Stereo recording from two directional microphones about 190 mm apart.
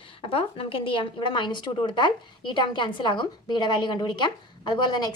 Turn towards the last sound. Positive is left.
turn(degrees=20)  # may be behind; listen again after turning